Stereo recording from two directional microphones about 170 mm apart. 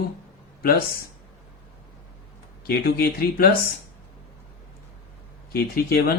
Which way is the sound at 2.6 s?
60° left (ahead or behind).